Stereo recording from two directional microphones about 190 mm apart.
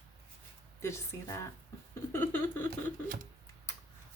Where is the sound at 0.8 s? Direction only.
15° left (ahead or behind).